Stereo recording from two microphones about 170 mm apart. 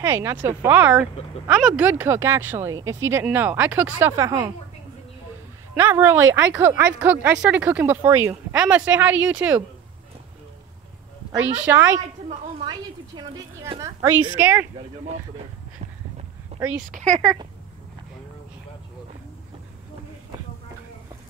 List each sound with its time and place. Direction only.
0.0 s speech: 15° right (ahead or behind)
5.8 s speech: 10° right (ahead or behind)
11.6 s speech: 10° right (ahead or behind)
12.6 s a woman's voice: 25° right (ahead or behind)
16.5 s a sound: 40° right (ahead or behind)
16.9 s speech: 45° right (ahead or behind)
17.2 s a woman's voice: 20° right (ahead or behind)